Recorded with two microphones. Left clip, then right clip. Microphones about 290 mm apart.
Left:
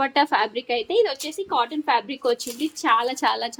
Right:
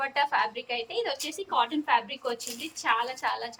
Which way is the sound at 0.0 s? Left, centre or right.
Left.